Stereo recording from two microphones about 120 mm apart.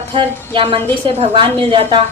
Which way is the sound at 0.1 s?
50° right (ahead or behind).